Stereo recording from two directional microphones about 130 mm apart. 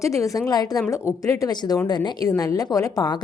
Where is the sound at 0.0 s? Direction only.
25° left (ahead or behind).